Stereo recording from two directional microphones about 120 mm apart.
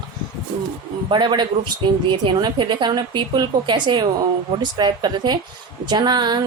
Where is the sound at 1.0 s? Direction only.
40° right (ahead or behind).